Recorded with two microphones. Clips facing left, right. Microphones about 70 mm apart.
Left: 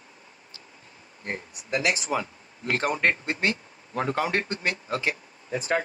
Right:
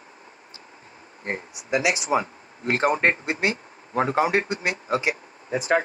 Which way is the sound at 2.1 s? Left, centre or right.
Right.